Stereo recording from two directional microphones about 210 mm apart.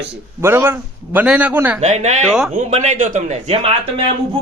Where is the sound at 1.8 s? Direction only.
35° right (ahead or behind).